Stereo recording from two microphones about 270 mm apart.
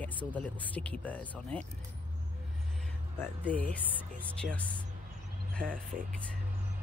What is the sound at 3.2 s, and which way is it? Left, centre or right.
Speech, centre.